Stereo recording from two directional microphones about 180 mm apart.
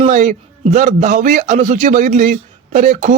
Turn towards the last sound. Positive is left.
turn(degrees=-45)  # may be behind; listen again after turning